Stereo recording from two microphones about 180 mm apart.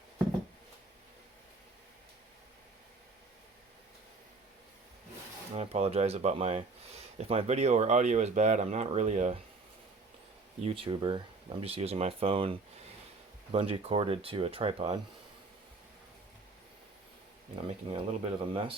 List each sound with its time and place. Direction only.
5.5 s speech: 35° right (ahead or behind)
10.7 s speech: 30° right (ahead or behind)
17.7 s speech: 30° right (ahead or behind)